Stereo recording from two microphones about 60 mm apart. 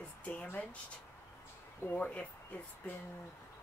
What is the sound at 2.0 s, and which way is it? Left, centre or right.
Speech, left.